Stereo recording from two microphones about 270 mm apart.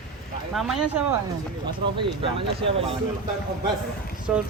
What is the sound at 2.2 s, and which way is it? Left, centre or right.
Speech, right.